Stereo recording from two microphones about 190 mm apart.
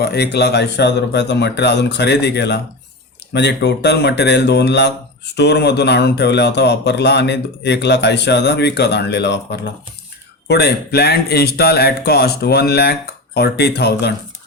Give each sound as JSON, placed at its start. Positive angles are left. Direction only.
{"t": 0.0, "sound": "speech", "side_deg": 60}